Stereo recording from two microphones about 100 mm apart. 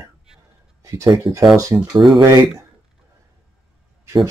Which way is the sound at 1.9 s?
55° right (ahead or behind).